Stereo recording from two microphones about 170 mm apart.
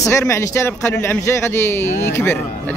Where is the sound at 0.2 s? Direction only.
15° left (ahead or behind).